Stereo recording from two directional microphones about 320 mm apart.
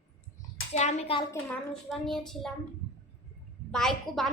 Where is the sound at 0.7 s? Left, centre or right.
Left.